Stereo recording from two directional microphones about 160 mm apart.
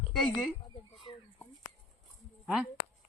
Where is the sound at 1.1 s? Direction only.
30° left (ahead or behind).